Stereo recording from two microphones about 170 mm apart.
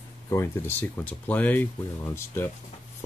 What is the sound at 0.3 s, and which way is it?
Speech, 15° left (ahead or behind).